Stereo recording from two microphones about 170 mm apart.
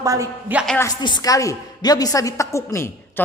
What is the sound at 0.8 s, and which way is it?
A woman's voice, 25° left (ahead or behind).